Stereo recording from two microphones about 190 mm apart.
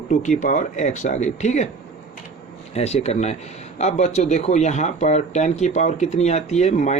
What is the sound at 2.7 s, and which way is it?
Speech, 35° left (ahead or behind).